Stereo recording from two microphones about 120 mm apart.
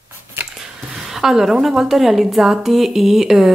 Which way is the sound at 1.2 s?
Centre (ahead or behind).